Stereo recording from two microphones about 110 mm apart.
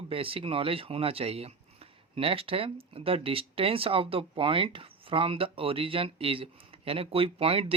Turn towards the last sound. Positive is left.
turn(degrees=-60)  # may be behind; listen again after turning